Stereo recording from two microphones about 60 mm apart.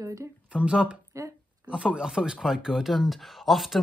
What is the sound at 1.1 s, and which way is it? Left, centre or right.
Speech, right.